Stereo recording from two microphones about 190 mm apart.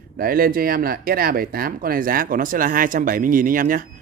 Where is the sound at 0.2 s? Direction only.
50° right (ahead or behind).